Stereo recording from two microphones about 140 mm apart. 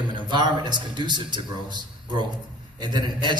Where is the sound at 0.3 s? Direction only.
30° right (ahead or behind).